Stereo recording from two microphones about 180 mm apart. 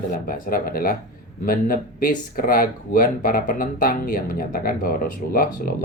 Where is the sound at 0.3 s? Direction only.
50° left (ahead or behind).